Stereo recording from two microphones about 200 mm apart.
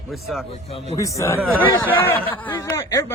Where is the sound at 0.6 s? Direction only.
30° left (ahead or behind).